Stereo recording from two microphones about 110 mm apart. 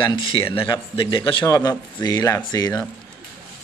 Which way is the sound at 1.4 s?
30° left (ahead or behind).